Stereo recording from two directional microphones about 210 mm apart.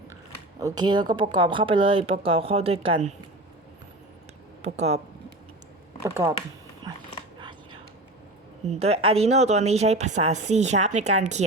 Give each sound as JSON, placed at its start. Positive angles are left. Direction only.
{"t": 0.6, "sound": "a woman's voice", "side_deg": -20}
{"t": 4.6, "sound": "a woman's voice", "side_deg": -30}
{"t": 6.1, "sound": "speech", "side_deg": -10}
{"t": 7.3, "sound": "whispering", "side_deg": -20}
{"t": 8.7, "sound": "a woman's voice", "side_deg": -30}